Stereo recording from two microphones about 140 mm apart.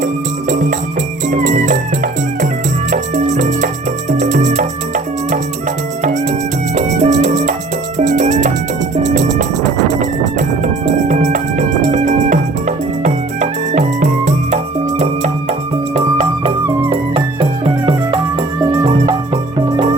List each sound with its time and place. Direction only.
0.0 s music: 60° right (ahead or behind)
2.9 s music: 60° right (ahead or behind)
6.7 s music: 55° right (ahead or behind)
16.9 s music: 40° right (ahead or behind)